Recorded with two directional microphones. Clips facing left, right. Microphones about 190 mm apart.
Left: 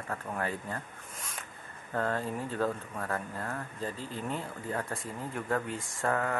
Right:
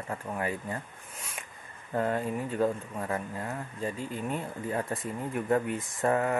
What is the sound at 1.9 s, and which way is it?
Speech, 15° right (ahead or behind).